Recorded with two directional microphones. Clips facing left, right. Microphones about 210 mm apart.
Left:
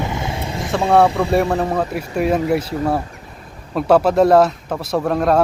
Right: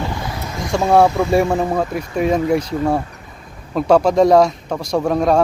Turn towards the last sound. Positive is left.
turn(degrees=0)  # may be behind; listen again after turning